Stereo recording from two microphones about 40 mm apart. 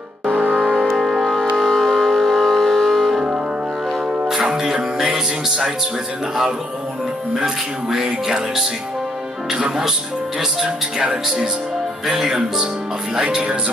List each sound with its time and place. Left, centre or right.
0.3 s music: right
0.7 s a sound: centre
1.2 s music: centre
4.3 s music: centre
7.3 s speech: centre
11.0 s speech: right
12.1 s speech: centre